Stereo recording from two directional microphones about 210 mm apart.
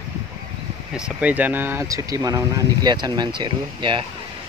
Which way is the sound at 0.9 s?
5° right (ahead or behind).